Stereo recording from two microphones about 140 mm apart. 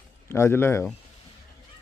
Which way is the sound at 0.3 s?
20° left (ahead or behind).